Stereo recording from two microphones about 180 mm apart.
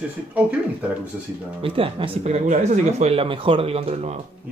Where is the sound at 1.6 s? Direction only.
30° right (ahead or behind).